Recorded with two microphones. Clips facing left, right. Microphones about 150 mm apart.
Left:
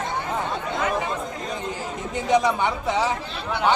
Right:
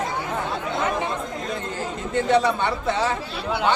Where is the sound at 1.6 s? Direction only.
15° left (ahead or behind).